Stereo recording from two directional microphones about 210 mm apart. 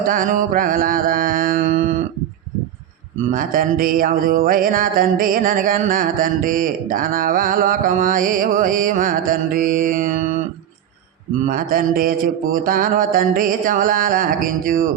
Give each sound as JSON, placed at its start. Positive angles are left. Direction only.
{"t": 0.0, "sound": "music", "side_deg": -40}
{"t": 3.3, "sound": "music", "side_deg": -40}
{"t": 11.4, "sound": "music", "side_deg": -40}